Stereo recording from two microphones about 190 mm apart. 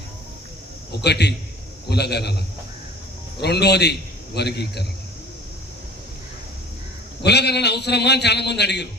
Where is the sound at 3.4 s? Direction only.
60° left (ahead or behind).